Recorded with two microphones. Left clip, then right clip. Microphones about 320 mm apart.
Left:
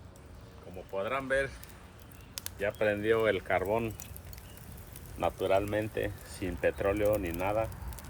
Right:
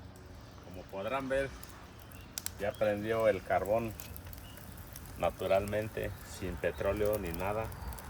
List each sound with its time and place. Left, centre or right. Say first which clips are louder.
0.9 s speech: left 3 dB; centre
2.6 s speech: left 2 dB; centre
3.2 s speech: left 1 dB; left
5.2 s speech: left 2 dB; left